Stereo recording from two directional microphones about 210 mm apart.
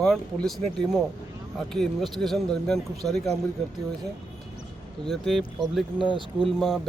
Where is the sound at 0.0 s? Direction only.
5° left (ahead or behind).